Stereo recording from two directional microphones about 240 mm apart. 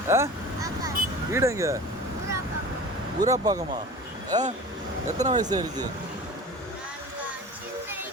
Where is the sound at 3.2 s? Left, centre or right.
Centre.